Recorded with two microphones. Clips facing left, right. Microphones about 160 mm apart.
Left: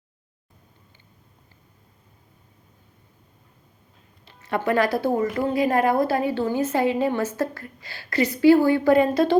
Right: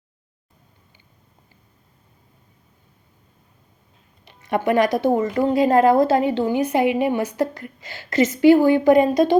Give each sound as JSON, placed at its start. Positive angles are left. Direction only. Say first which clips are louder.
{"t": 4.3, "sound": "a woman's voice", "louder": "right 3 dB", "side_deg": -15}